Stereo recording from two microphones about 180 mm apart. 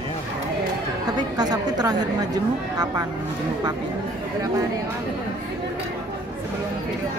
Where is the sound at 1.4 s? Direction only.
20° right (ahead or behind).